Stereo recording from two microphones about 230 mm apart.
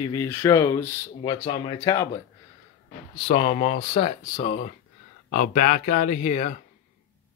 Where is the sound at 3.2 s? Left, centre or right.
Left.